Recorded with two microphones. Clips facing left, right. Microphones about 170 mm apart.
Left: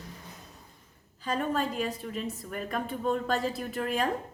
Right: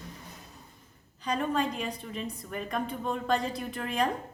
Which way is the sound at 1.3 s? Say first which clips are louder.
Even; 5° left (ahead or behind).